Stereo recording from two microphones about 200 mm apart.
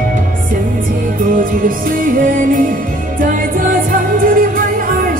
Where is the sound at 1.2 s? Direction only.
45° right (ahead or behind).